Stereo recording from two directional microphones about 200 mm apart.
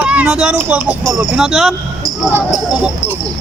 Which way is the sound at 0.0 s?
5° right (ahead or behind).